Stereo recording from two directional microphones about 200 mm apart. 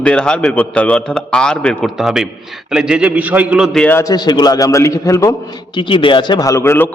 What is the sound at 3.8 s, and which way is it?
A man's voice, 15° left (ahead or behind).